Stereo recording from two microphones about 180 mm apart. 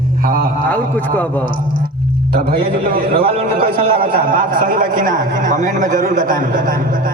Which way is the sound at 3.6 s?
55° right (ahead or behind).